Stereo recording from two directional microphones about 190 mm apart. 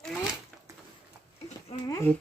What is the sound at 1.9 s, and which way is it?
Speech, 15° left (ahead or behind).